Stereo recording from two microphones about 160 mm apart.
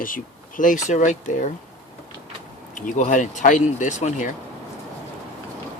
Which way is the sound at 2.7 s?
55° left (ahead or behind).